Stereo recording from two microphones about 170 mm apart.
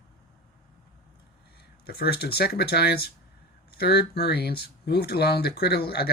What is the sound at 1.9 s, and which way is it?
Speech, 65° left (ahead or behind).